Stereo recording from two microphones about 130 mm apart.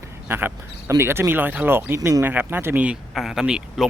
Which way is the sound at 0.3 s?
15° right (ahead or behind).